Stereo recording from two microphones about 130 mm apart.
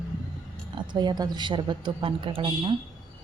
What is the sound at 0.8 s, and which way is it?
A woman's voice, 35° right (ahead or behind).